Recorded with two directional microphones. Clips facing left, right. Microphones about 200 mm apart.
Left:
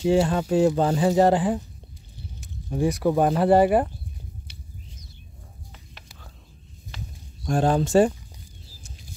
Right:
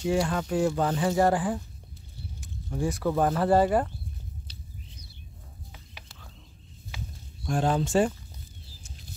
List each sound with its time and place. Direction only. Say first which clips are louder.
0.0 s speech: left 6 dB; 25° left (ahead or behind)
2.7 s speech: left 5 dB; 20° left (ahead or behind)
7.4 s speech: left 4 dB; 40° left (ahead or behind)